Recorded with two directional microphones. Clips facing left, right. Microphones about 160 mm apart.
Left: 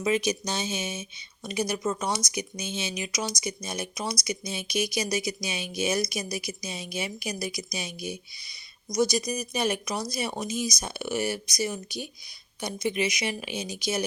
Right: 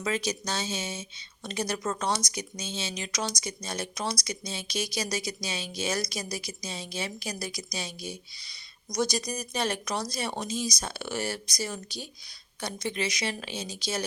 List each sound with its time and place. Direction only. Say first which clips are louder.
0.0 s speech: left 4 dB; 15° left (ahead or behind)